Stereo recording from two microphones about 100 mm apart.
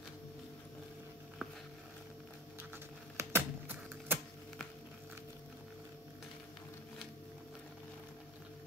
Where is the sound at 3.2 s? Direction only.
20° right (ahead or behind).